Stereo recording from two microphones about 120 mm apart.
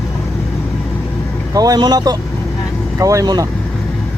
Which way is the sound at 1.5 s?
30° right (ahead or behind).